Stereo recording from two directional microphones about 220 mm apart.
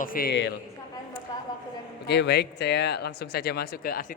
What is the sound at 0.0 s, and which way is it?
Speech, 40° left (ahead or behind).